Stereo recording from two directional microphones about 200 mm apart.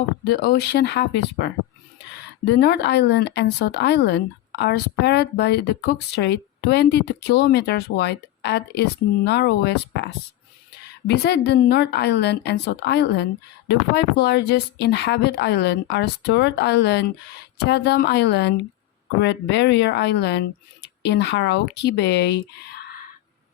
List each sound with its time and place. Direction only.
0.3 s speech: 50° left (ahead or behind)
2.6 s speech: 55° left (ahead or behind)
11.1 s speech: 55° left (ahead or behind)